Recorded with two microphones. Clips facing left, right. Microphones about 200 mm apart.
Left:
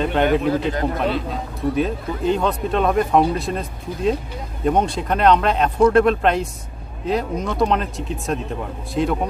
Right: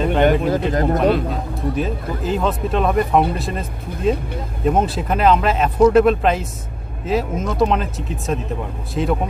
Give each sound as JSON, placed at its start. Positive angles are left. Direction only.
{"t": 0.0, "sound": "speech", "side_deg": 0}
{"t": 0.4, "sound": "speech", "side_deg": -45}
{"t": 1.8, "sound": "speech", "side_deg": 0}